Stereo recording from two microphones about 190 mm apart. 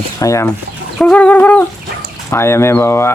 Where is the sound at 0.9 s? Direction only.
5° left (ahead or behind).